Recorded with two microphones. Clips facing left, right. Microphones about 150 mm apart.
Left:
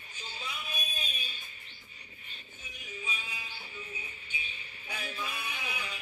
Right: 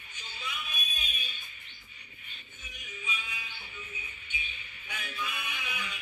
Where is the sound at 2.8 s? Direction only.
35° left (ahead or behind).